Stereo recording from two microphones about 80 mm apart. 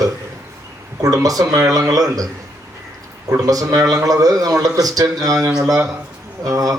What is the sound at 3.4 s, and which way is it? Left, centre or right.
A man's voice, right.